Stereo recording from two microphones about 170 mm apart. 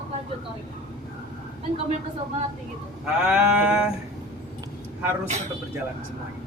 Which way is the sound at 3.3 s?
5° right (ahead or behind).